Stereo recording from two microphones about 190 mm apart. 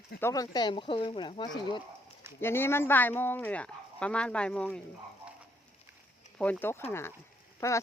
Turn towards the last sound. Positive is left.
turn(degrees=15)  # may be behind; listen again after turning